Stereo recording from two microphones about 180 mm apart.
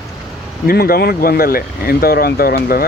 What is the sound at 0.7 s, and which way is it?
Speech, 55° left (ahead or behind).